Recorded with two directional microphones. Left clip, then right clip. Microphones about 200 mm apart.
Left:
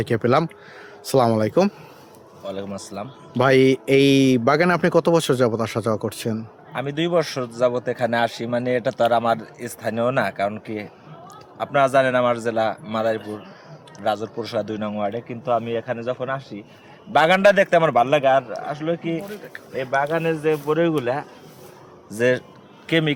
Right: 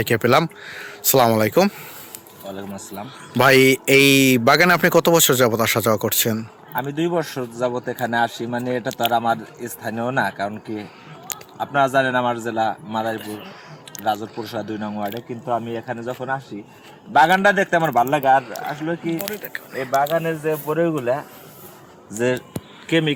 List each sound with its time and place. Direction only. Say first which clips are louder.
0.0 s speech: right 3 dB; 5° right (ahead or behind)
2.5 s a man's voice: left 2 dB; 20° left (ahead or behind)
3.3 s speech: right 3 dB; 15° right (ahead or behind)
6.7 s a man's voice: left 1 dB; 20° left (ahead or behind)
11.6 s a man's voice: left 1 dB; 20° left (ahead or behind)
13.2 s speech: right 1 dB; 40° right (ahead or behind)
14.0 s a man's voice: even; 20° left (ahead or behind)
19.7 s a man's voice: right 2 dB; 25° left (ahead or behind)
22.2 s speech: left 2 dB; 20° left (ahead or behind)